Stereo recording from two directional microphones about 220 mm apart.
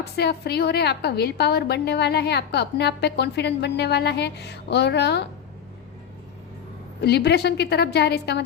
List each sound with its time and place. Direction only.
0.0 s a woman's voice: 50° left (ahead or behind)
7.0 s a woman's voice: 50° left (ahead or behind)